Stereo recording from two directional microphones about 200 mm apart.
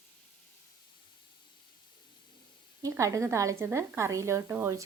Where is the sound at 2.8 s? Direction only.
15° right (ahead or behind).